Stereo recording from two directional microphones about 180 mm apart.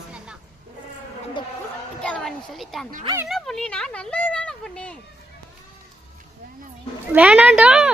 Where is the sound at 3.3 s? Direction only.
Centre (ahead or behind).